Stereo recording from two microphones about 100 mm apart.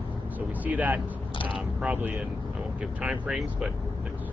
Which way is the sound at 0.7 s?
15° right (ahead or behind).